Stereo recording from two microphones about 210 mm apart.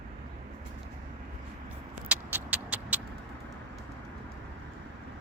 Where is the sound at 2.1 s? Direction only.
5° right (ahead or behind).